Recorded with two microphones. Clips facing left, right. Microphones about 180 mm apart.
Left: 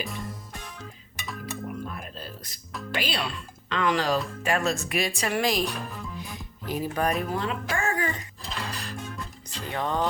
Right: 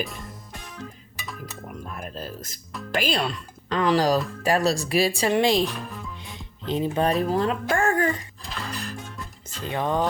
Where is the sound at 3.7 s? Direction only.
35° right (ahead or behind).